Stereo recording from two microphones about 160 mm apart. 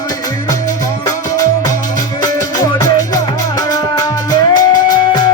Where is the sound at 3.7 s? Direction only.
25° left (ahead or behind).